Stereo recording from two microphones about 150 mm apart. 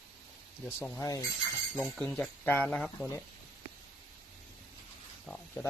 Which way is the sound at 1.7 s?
5° left (ahead or behind).